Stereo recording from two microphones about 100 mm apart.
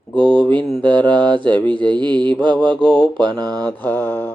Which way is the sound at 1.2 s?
50° right (ahead or behind).